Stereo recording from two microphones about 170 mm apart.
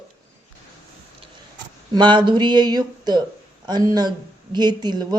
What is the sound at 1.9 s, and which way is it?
A man's voice, 25° right (ahead or behind).